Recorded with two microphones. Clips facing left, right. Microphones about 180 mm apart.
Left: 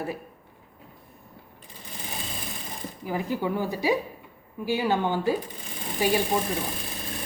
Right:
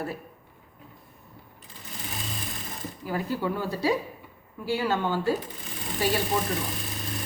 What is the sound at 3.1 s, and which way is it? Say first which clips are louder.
A woman's voice: left 1 dB; 15° left (ahead or behind).